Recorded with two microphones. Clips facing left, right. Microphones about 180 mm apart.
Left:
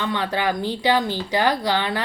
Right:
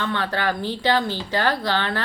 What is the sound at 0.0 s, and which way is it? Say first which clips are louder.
Speech: left 1 dB; 15° left (ahead or behind).